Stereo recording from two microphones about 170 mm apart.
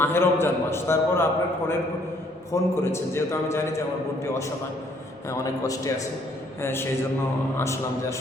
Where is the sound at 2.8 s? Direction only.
15° left (ahead or behind).